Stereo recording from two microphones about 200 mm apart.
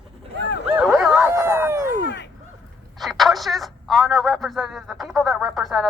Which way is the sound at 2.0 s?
60° left (ahead or behind).